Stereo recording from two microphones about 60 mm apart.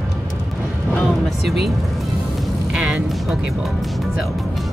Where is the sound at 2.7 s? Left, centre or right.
Centre.